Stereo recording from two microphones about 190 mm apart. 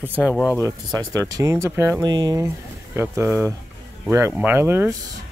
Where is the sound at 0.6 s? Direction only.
20° right (ahead or behind).